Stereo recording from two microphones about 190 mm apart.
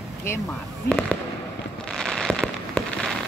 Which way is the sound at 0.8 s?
5° left (ahead or behind).